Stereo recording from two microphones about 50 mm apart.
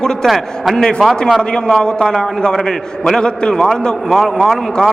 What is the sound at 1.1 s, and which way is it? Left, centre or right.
Speech, centre.